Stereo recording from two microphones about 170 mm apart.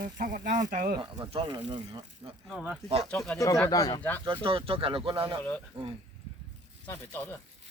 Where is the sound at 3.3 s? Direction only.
20° left (ahead or behind).